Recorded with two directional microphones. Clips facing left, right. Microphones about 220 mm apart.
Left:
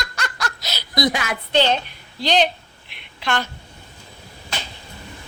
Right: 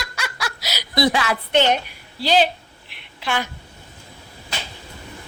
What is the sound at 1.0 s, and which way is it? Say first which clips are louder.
Speech: right 2 dB; 30° right (ahead or behind).